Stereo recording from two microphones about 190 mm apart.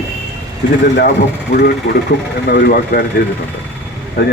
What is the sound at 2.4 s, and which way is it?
Speech, 55° left (ahead or behind).